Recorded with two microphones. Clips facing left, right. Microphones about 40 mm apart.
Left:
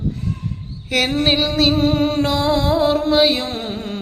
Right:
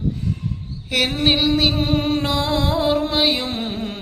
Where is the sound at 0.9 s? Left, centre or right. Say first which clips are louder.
Left 1 dB; centre.